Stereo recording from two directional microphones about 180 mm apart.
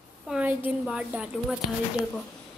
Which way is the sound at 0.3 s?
10° right (ahead or behind).